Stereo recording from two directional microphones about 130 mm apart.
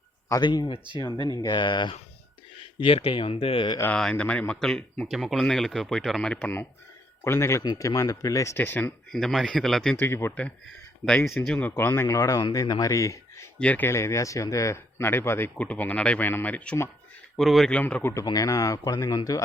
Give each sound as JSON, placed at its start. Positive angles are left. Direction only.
{"t": 0.3, "sound": "speech", "side_deg": 30}
{"t": 3.9, "sound": "a man's voice", "side_deg": 5}
{"t": 9.2, "sound": "speech", "side_deg": 0}
{"t": 10.0, "sound": "a man's voice", "side_deg": 20}
{"t": 13.6, "sound": "speech", "side_deg": 10}
{"t": 17.3, "sound": "speech", "side_deg": 0}
{"t": 18.1, "sound": "a man's voice", "side_deg": 25}